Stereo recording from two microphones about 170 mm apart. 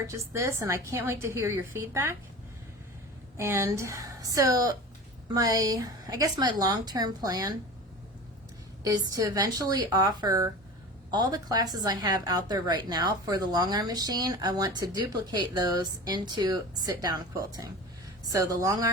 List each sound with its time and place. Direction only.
0.1 s a woman's voice: 15° right (ahead or behind)
3.3 s a woman's voice: 15° right (ahead or behind)
8.8 s a woman's voice: 20° right (ahead or behind)